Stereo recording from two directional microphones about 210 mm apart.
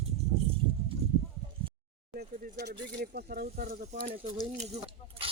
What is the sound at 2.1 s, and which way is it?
Speech, 50° right (ahead or behind).